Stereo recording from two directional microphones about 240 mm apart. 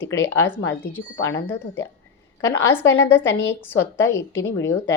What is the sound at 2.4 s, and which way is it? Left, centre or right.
Speech, centre.